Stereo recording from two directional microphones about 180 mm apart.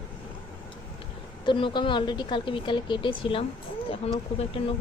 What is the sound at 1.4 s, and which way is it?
A woman's voice, 25° left (ahead or behind).